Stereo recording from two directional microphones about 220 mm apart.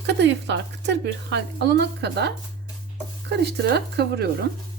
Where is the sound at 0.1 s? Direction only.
50° right (ahead or behind).